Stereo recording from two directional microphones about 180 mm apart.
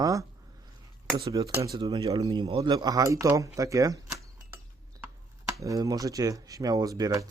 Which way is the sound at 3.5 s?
20° right (ahead or behind).